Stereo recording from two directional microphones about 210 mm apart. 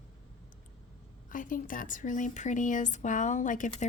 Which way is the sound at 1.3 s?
40° left (ahead or behind).